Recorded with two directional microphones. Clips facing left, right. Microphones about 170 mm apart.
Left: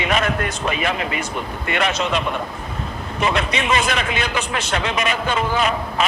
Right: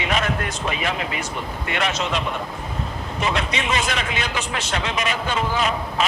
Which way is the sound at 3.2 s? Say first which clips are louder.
Left 3 dB; 60° left (ahead or behind).